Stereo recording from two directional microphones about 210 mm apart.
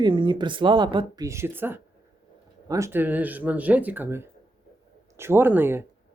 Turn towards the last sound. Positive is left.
turn(degrees=-10)  # may be behind; listen again after turning